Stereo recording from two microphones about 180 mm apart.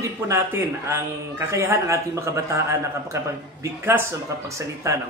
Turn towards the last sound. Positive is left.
turn(degrees=-15)  # may be behind; listen again after turning